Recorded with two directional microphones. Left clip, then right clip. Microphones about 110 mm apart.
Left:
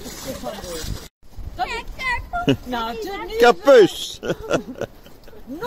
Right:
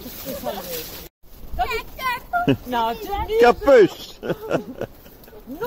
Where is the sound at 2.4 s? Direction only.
5° left (ahead or behind).